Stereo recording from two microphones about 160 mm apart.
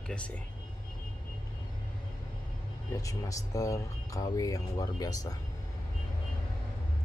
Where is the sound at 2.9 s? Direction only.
20° left (ahead or behind).